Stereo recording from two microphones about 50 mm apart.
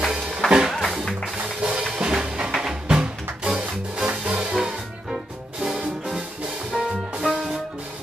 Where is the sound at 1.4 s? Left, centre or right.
Right; by 2.8 s centre.